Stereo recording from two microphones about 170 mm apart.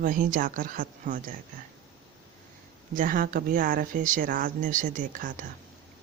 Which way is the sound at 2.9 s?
55° right (ahead or behind).